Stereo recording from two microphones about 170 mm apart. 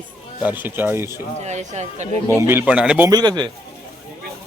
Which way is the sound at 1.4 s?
40° right (ahead or behind).